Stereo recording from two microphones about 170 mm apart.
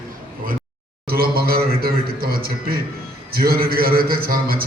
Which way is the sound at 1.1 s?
65° right (ahead or behind).